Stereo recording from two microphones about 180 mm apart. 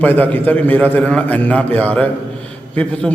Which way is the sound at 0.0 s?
10° left (ahead or behind).